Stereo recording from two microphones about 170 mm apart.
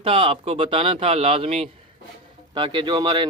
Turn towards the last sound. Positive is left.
turn(degrees=-30)  # may be behind; listen again after turning